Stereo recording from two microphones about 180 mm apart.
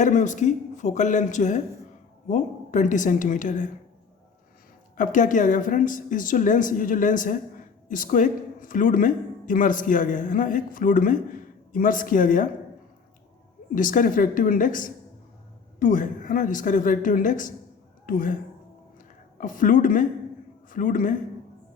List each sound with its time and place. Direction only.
0.0 s speech: 45° left (ahead or behind)
4.9 s speech: 45° left (ahead or behind)
13.7 s speech: 50° left (ahead or behind)
19.4 s speech: 45° left (ahead or behind)